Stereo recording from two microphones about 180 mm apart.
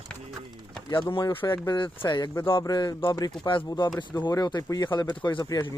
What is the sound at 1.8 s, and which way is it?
Speech, 30° left (ahead or behind).